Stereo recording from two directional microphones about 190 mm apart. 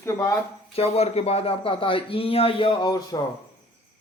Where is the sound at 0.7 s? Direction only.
35° left (ahead or behind).